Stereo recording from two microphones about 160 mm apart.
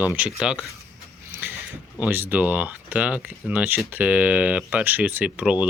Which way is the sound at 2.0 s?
10° right (ahead or behind).